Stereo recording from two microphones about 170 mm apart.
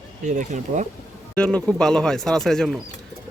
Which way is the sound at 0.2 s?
45° right (ahead or behind).